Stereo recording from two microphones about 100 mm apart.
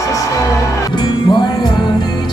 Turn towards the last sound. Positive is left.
turn(degrees=50)  # may be behind; listen again after turning